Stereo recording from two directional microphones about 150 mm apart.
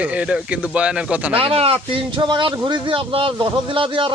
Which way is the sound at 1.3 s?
40° right (ahead or behind).